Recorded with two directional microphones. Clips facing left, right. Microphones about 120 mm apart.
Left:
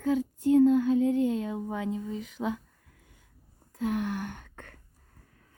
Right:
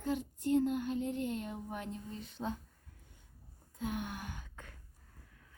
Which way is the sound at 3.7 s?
70° left (ahead or behind).